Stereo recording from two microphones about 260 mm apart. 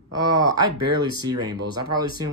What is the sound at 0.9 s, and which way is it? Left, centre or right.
Speech, centre.